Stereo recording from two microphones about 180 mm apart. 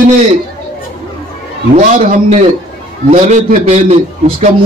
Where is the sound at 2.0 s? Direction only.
40° right (ahead or behind).